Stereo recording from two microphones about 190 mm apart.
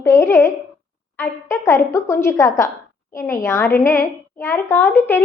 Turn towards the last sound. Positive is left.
turn(degrees=10)  # may be behind; listen again after turning